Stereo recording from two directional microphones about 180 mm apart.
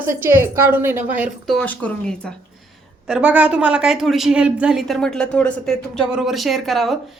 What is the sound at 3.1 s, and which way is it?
A woman's voice, 10° right (ahead or behind).